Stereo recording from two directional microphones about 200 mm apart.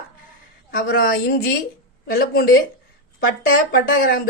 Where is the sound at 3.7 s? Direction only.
45° left (ahead or behind).